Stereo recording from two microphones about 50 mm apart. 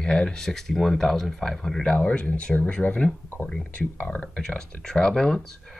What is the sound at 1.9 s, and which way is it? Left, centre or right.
Speech, left.